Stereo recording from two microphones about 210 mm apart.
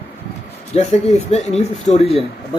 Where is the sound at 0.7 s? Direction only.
30° left (ahead or behind).